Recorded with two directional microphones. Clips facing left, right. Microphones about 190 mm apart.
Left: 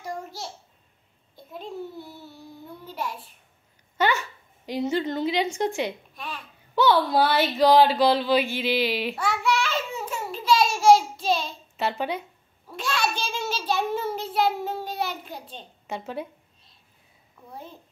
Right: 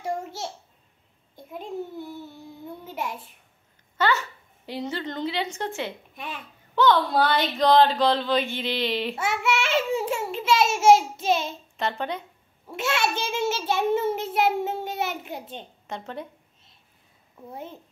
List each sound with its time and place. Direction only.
0.0 s babbling: 25° right (ahead or behind)
4.0 s speech: 15° left (ahead or behind)
6.1 s speech: 20° right (ahead or behind)
6.7 s speech: 10° left (ahead or behind)
9.1 s a child's voice: 25° right (ahead or behind)
11.7 s speech: 5° left (ahead or behind)
12.6 s a child's voice: 25° right (ahead or behind)
15.9 s speech: 5° left (ahead or behind)
17.5 s a child's voice: 20° right (ahead or behind)